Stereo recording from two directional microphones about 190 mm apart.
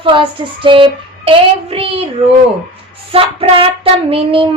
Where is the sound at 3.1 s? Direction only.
30° right (ahead or behind).